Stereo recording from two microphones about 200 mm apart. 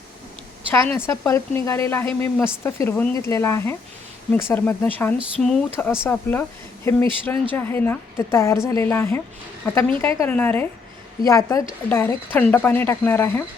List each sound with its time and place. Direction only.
0.7 s speech: 10° left (ahead or behind)